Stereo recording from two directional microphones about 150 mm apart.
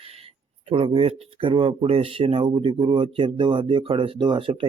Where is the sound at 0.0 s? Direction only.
40° right (ahead or behind).